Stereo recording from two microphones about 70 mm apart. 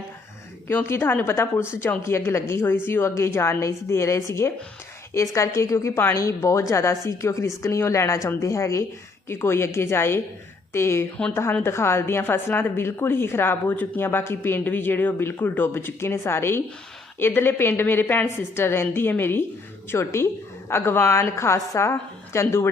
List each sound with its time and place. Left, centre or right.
0.9 s a woman's voice: left
6.1 s speech: left
9.3 s a woman's voice: left